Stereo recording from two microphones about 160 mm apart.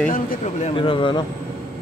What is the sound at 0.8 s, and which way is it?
Speech, 30° left (ahead or behind).